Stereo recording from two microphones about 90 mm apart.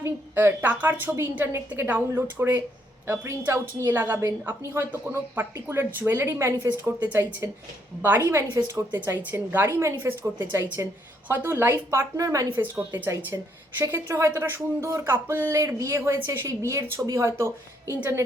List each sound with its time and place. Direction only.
0.0 s a woman's voice: 25° right (ahead or behind)
12.5 s a woman's voice: 20° right (ahead or behind)
13.1 s a woman's voice: 30° right (ahead or behind)
15.5 s speech: 35° right (ahead or behind)